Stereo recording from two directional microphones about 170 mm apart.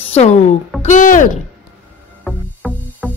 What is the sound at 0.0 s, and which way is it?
Speech, 40° left (ahead or behind).